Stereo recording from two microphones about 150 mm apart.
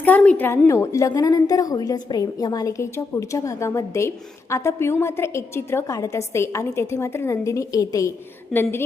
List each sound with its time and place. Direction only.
0.0 s a woman's voice: 10° left (ahead or behind)